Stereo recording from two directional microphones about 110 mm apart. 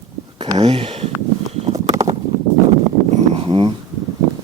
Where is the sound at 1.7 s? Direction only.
30° right (ahead or behind).